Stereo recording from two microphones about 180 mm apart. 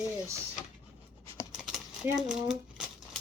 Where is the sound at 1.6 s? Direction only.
5° right (ahead or behind).